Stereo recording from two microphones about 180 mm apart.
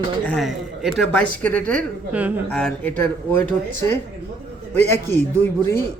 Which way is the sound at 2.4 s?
5° left (ahead or behind).